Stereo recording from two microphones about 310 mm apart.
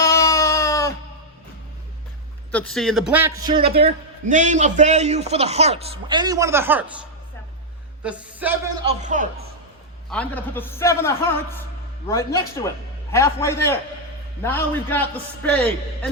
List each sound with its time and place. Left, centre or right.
0.0 s baby cry: centre
2.5 s a man's voice: centre
3.4 s a man's voice: centre
8.0 s a man's voice: centre
8.8 s a man's voice: right
10.1 s a man's voice: centre